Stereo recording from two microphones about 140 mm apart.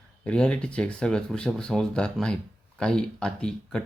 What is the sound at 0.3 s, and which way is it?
Speech, 5° left (ahead or behind).